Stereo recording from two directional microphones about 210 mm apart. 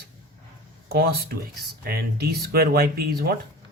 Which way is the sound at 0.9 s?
50° right (ahead or behind).